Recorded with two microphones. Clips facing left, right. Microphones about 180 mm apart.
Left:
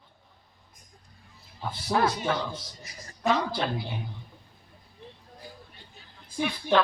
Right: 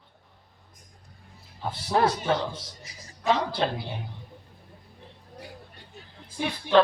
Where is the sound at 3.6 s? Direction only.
30° right (ahead or behind).